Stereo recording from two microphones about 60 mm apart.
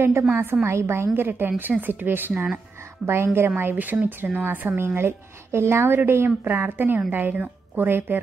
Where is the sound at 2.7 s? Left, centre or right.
Right.